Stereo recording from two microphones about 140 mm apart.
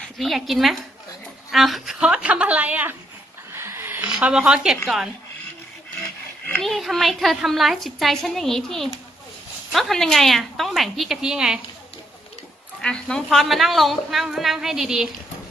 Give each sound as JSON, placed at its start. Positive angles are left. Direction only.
{"t": 0.0, "sound": "a woman's voice", "side_deg": 0}
{"t": 3.5, "sound": "a sound", "side_deg": -15}
{"t": 4.1, "sound": "a woman's voice", "side_deg": -5}
{"t": 6.6, "sound": "a woman's voice", "side_deg": 0}
{"t": 12.8, "sound": "a woman's voice", "side_deg": 5}